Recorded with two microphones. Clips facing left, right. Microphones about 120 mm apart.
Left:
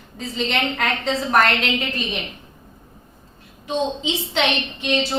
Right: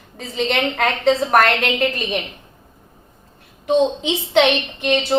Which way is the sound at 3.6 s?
60° right (ahead or behind).